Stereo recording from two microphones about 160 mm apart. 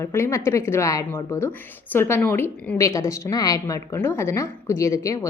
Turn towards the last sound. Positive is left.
turn(degrees=20)  # may be behind; listen again after turning